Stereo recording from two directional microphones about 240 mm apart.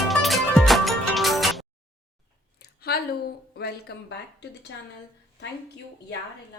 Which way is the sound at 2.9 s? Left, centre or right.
Left.